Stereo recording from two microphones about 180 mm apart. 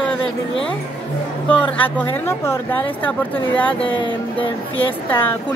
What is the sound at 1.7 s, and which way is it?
Speech, 10° left (ahead or behind).